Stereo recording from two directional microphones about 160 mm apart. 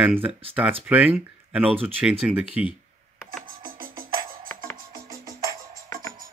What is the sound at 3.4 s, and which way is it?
Music, 60° right (ahead or behind).